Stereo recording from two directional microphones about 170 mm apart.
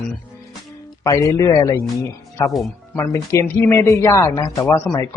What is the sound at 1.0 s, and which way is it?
Speech, 20° left (ahead or behind).